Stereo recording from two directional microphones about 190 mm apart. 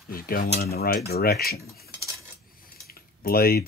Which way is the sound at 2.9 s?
50° left (ahead or behind).